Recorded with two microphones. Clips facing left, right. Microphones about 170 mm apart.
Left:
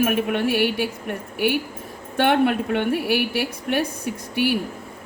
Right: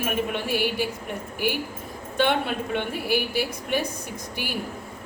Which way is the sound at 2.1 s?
60° left (ahead or behind).